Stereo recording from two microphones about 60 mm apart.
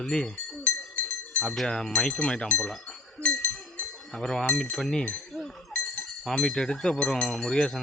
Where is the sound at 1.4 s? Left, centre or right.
Centre.